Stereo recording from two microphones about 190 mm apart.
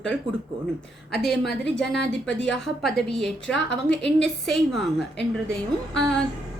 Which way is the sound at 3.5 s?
70° left (ahead or behind).